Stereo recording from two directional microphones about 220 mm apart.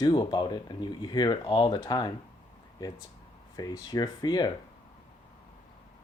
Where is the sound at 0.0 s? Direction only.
20° left (ahead or behind).